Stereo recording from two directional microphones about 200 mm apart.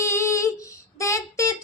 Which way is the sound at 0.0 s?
15° left (ahead or behind).